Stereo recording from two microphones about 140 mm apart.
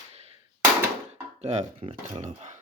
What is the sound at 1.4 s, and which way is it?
Speech, 50° right (ahead or behind).